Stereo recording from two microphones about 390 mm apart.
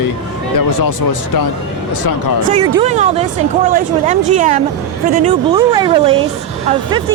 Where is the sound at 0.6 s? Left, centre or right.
Left.